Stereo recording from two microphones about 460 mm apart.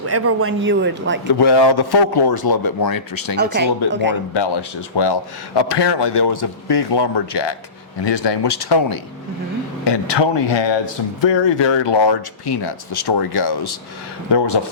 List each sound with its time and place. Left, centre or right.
0.0 s a man's voice: right
1.3 s speech: left
3.3 s a man's voice: right
4.4 s a man's voice: left